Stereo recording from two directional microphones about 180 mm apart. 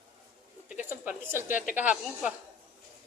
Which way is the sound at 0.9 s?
10° right (ahead or behind).